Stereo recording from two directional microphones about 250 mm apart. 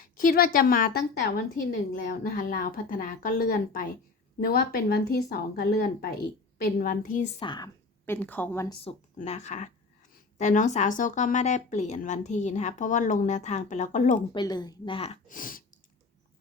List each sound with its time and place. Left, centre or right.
0.0 s a woman's voice: left
7.3 s a woman's voice: centre
8.7 s speech: left
14.3 s speech: centre; by 15.6 s left